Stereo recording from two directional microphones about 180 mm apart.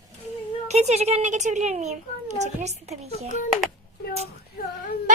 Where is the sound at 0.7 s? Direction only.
40° right (ahead or behind).